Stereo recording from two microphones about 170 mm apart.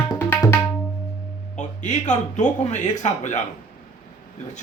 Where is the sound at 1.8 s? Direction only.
45° left (ahead or behind).